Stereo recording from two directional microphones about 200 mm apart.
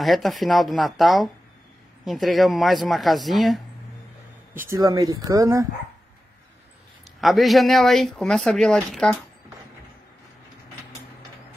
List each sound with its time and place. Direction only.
0.0 s speech: centre (ahead or behind)
4.6 s speech: 15° right (ahead or behind)
7.2 s speech: centre (ahead or behind)